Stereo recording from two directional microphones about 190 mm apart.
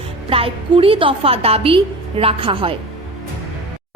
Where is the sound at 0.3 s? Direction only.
30° right (ahead or behind).